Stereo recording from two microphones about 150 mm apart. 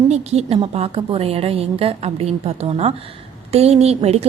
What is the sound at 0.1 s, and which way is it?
A woman's voice, 45° right (ahead or behind).